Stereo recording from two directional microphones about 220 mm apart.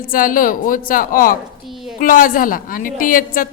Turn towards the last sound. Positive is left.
turn(degrees=40)  # may be behind; listen again after turning